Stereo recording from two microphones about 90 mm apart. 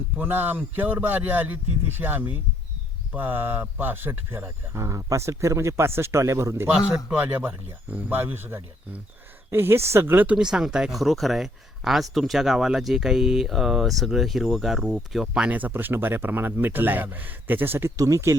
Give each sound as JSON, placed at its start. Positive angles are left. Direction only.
{"t": 0.2, "sound": "speech", "side_deg": -20}
{"t": 7.1, "sound": "speech", "side_deg": -20}
{"t": 10.2, "sound": "speech", "side_deg": -10}
{"t": 17.9, "sound": "speech", "side_deg": -40}